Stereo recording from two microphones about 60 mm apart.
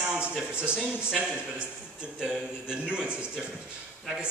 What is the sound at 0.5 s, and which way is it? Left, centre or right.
A man's voice, centre.